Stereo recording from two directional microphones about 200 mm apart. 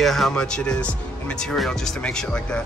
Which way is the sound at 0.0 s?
Centre (ahead or behind).